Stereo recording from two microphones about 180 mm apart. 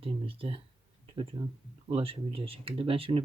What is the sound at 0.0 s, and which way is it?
Speech, 30° right (ahead or behind).